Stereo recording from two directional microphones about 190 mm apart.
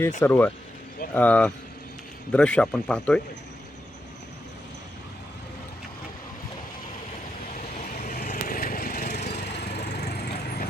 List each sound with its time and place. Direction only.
0.2 s a man's voice: 10° left (ahead or behind)
8.0 s vehicle: 35° left (ahead or behind)
9.4 s lawn mower: 65° left (ahead or behind)